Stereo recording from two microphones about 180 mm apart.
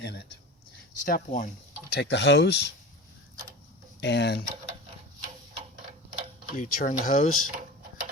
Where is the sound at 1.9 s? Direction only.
75° left (ahead or behind).